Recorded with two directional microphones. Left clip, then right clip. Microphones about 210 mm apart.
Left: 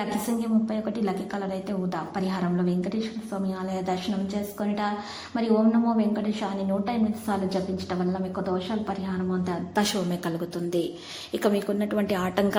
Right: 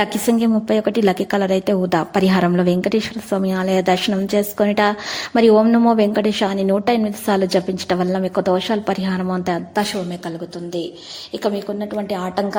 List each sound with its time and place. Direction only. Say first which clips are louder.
0.4 s a woman's voice: right 11 dB; 45° right (ahead or behind)
11.4 s a woman's voice: right 3 dB; centre (ahead or behind)